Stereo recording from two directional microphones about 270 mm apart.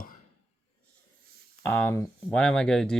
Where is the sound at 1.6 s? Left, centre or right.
Centre.